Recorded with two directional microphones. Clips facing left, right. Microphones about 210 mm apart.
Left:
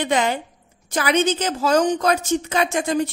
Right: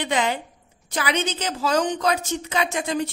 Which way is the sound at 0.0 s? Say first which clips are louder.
Left 3 dB; 45° left (ahead or behind).